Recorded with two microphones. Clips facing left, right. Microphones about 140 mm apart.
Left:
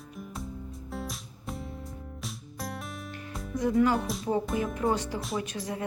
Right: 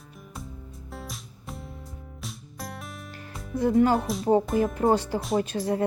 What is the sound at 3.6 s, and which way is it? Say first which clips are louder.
Speech: right 4 dB; 30° right (ahead or behind).